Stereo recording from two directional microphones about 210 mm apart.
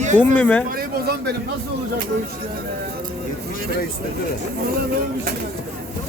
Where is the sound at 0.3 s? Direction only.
5° left (ahead or behind).